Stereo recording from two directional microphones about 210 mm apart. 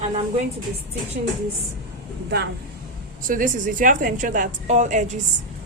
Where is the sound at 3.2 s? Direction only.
40° right (ahead or behind).